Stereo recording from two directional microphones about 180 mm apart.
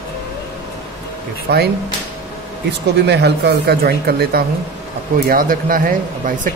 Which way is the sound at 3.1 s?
65° right (ahead or behind).